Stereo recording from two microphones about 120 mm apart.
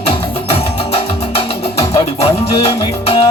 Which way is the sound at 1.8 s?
55° left (ahead or behind).